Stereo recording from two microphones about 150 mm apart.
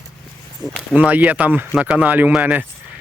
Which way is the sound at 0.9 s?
10° right (ahead or behind).